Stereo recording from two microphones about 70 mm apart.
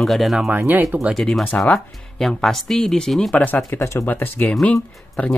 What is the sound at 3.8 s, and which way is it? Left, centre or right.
Speech, left.